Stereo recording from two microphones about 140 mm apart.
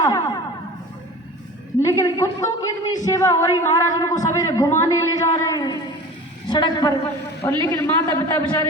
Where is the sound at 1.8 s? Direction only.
25° left (ahead or behind).